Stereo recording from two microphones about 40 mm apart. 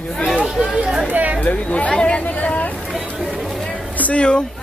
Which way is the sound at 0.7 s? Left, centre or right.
Right.